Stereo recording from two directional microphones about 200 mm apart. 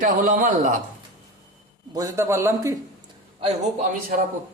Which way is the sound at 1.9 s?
15° right (ahead or behind).